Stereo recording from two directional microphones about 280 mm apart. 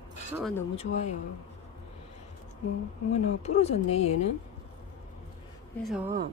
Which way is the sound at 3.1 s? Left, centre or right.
Left.